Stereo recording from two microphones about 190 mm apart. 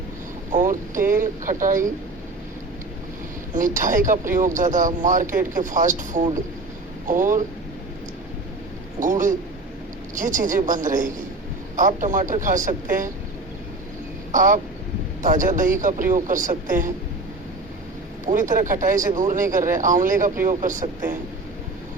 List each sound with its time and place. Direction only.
0.5 s speech: 45° right (ahead or behind)
3.5 s speech: 45° right (ahead or behind)
9.0 s speech: 45° right (ahead or behind)
14.3 s speech: 45° right (ahead or behind)
18.3 s speech: 45° right (ahead or behind)